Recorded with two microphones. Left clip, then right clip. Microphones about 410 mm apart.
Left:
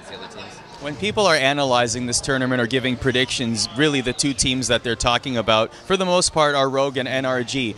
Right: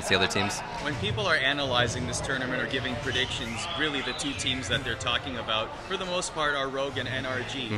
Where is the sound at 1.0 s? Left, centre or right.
Left.